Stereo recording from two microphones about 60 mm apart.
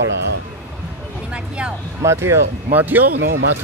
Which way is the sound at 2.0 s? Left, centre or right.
Right.